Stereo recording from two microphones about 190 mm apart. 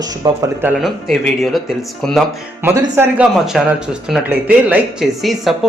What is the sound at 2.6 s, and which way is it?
Speech, 10° right (ahead or behind).